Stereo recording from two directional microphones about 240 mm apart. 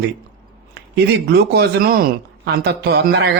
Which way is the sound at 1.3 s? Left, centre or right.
Right.